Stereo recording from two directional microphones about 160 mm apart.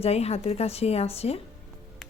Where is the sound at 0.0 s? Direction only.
40° left (ahead or behind).